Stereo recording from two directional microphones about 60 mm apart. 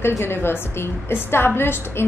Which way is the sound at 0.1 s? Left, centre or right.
Left.